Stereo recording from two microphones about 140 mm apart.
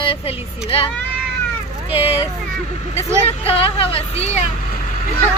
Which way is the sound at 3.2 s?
45° left (ahead or behind).